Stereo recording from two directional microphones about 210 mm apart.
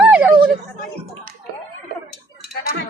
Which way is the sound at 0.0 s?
5° right (ahead or behind).